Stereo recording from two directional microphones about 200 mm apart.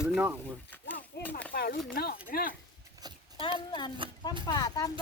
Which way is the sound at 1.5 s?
50° left (ahead or behind).